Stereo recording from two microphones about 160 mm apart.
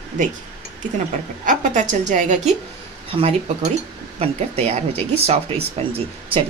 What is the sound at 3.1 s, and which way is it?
A woman's voice, 40° right (ahead or behind).